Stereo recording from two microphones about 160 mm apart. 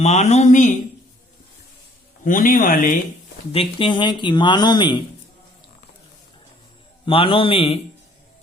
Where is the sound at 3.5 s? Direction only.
35° left (ahead or behind).